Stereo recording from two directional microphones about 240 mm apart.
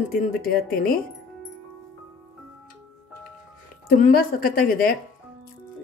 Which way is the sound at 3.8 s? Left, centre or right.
Left.